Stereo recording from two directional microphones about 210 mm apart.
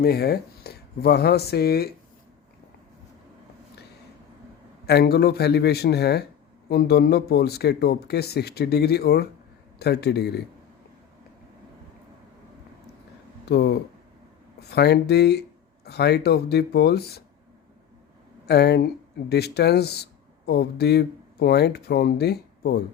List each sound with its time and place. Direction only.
0.0 s speech: 50° left (ahead or behind)
4.9 s speech: 50° left (ahead or behind)
13.4 s speech: 50° left (ahead or behind)
18.4 s speech: 50° left (ahead or behind)